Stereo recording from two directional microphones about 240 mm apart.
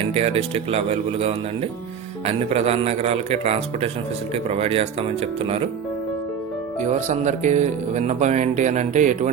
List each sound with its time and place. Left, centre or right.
0.1 s speech: right
6.8 s speech: right